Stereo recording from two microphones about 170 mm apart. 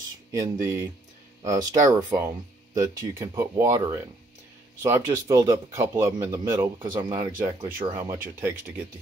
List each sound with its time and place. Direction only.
0.3 s speech: 20° right (ahead or behind)